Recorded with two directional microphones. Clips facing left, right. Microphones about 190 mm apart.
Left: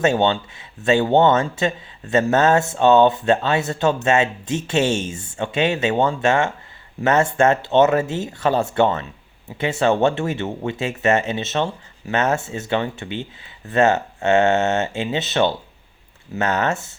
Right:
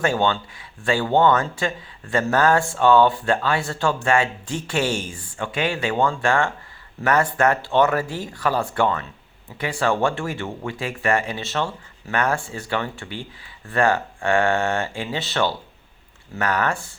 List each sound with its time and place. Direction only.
0.0 s speech: 20° left (ahead or behind)